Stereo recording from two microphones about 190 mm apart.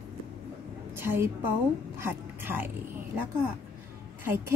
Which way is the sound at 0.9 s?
10° right (ahead or behind).